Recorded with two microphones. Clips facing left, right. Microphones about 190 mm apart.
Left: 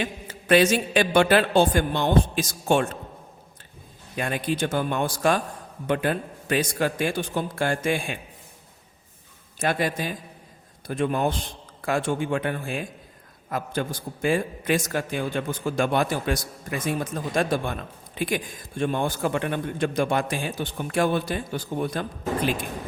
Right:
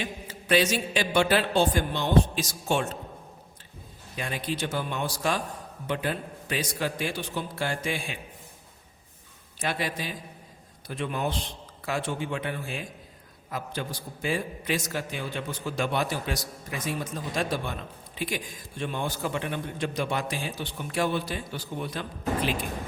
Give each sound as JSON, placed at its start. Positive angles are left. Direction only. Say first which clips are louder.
{"t": 0.0, "sound": "a woman's voice", "louder": "left 4 dB", "side_deg": 55}
{"t": 4.2, "sound": "a man's voice", "louder": "left 5 dB", "side_deg": 55}
{"t": 9.6, "sound": "a man's voice", "louder": "left 6 dB", "side_deg": 50}